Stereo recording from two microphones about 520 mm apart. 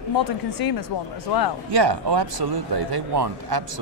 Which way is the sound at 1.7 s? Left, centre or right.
Right.